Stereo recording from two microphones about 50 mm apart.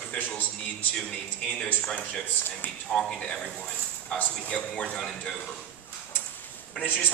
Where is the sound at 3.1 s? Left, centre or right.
Left.